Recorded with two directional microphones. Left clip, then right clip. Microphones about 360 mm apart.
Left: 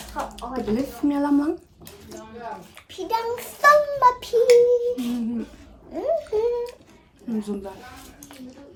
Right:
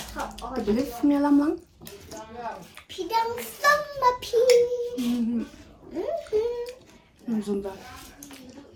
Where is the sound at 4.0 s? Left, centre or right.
Left.